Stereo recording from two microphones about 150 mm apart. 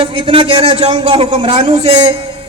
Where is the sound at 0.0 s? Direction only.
40° right (ahead or behind).